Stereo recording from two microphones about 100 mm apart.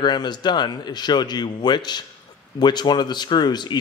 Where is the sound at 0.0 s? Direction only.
45° left (ahead or behind).